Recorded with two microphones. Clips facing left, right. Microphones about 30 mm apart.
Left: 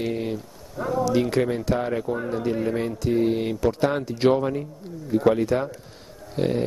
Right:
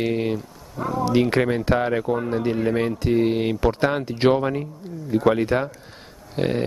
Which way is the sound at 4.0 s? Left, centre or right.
Right.